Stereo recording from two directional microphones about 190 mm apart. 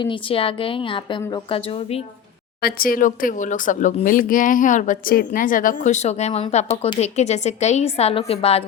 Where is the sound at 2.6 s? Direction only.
50° left (ahead or behind).